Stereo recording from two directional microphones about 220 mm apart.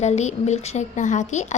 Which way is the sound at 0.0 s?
30° left (ahead or behind).